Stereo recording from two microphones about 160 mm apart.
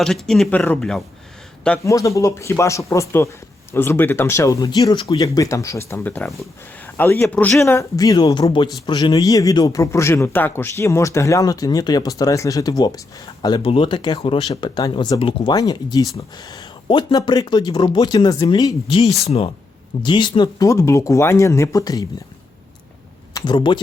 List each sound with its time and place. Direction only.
0.0 s speech: 5° left (ahead or behind)
1.8 s speech: 20° left (ahead or behind)
15.2 s speech: 35° left (ahead or behind)
19.2 s speech: 40° left (ahead or behind)
20.0 s speech: 30° left (ahead or behind)
23.3 s speech: 30° left (ahead or behind)